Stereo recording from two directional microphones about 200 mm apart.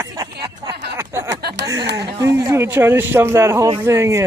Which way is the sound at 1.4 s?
55° right (ahead or behind).